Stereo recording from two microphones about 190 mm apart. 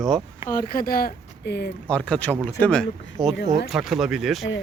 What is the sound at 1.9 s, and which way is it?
A man's voice, 5° left (ahead or behind).